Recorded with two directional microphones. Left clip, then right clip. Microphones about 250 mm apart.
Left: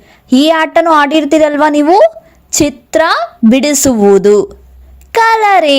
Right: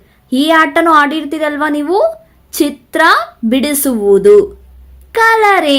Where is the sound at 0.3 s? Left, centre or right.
Left.